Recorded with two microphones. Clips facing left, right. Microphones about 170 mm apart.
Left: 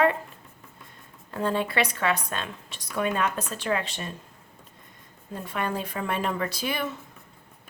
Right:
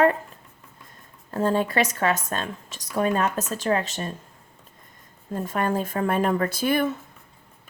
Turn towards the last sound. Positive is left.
turn(degrees=-50)  # may be behind; listen again after turning